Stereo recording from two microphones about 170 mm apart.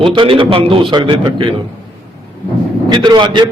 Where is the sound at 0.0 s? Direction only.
30° right (ahead or behind).